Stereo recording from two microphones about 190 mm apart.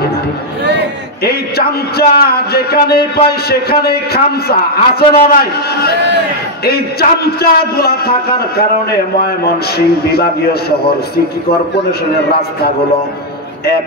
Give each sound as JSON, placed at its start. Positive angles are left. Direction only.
{"t": 1.2, "sound": "a man's voice", "side_deg": 55}
{"t": 10.0, "sound": "a man's voice", "side_deg": 55}